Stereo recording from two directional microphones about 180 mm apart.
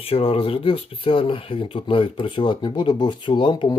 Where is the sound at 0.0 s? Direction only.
35° left (ahead or behind).